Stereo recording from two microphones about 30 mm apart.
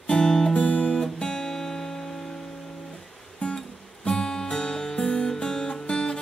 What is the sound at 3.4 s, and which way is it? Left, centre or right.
Music, left.